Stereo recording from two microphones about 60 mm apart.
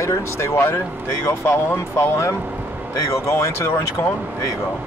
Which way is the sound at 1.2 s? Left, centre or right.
Left.